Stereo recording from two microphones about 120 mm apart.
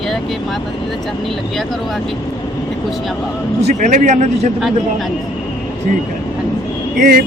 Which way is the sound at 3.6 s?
75° right (ahead or behind).